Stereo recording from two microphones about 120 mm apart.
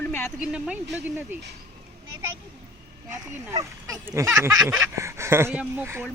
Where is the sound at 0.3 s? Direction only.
5° right (ahead or behind).